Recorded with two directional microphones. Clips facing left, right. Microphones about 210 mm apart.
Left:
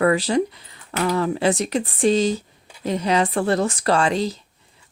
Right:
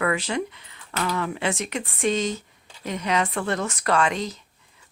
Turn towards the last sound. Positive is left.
turn(degrees=30)  # may be behind; listen again after turning